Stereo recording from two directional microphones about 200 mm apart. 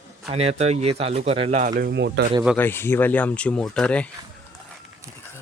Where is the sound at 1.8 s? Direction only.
60° right (ahead or behind).